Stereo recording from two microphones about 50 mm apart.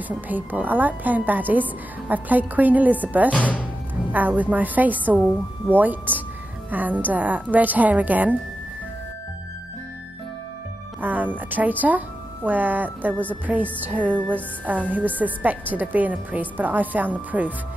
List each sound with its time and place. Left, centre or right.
0.1 s a woman's voice: right
3.3 s speech: left
4.1 s a woman's voice: right
11.0 s music: right
12.4 s a woman's voice: right